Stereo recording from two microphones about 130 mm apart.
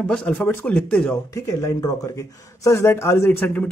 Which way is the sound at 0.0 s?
5° left (ahead or behind).